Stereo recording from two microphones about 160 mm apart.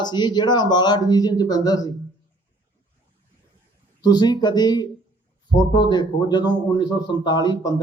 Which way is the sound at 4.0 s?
25° left (ahead or behind).